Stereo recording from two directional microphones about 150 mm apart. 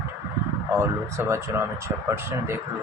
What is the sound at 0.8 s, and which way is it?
Speech, 20° right (ahead or behind).